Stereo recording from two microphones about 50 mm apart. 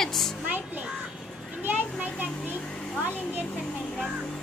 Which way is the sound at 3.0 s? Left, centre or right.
Right.